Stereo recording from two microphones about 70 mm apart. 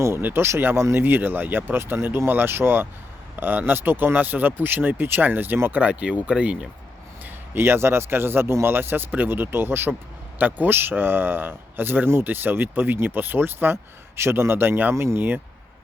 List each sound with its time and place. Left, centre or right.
0.2 s a man's voice: right; by 6.7 s centre
7.5 s a man's voice: right